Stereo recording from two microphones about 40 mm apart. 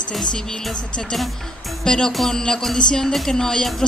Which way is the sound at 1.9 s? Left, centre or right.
Centre.